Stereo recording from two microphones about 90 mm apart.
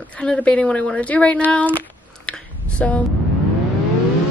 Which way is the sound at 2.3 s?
15° left (ahead or behind).